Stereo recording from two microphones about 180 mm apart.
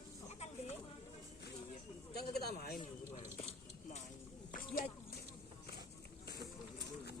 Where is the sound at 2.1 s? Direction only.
60° left (ahead or behind).